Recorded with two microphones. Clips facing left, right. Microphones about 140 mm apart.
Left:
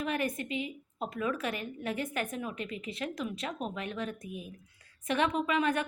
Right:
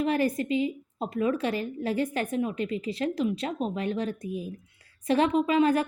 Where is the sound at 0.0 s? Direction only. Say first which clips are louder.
Right 7 dB; 30° right (ahead or behind).